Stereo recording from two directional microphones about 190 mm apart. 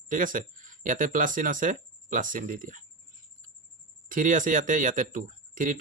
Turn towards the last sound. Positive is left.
turn(degrees=-45)  # may be behind; listen again after turning